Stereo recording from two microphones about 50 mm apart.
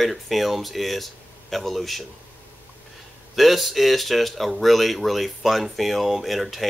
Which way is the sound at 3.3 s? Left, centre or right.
Centre.